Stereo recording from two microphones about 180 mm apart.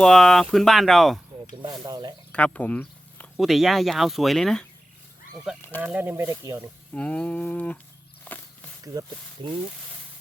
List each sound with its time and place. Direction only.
0.0 s speech: 5° left (ahead or behind)
1.6 s speech: 25° right (ahead or behind)
2.3 s a sound: 5° left (ahead or behind)
3.3 s speech: centre (ahead or behind); by 6.7 s 20° right (ahead or behind)
6.9 s livestock: 5° left (ahead or behind)
8.2 s walk: 10° left (ahead or behind)
8.8 s speech: 20° right (ahead or behind)